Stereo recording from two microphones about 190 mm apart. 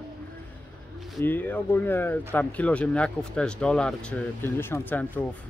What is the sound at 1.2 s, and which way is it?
Speech, 10° left (ahead or behind).